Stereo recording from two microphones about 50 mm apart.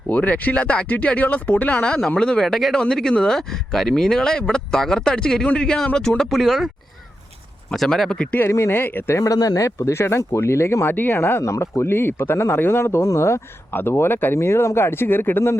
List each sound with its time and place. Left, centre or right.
0.1 s speech: left; by 2.5 s centre
2.5 s speech: centre
6.4 s speech: centre
7.7 s speech: centre
8.4 s speech: left
8.7 s speech: left
9.0 s speech: left
10.8 s speech: left
13.7 s speech: left
14.3 s speech: left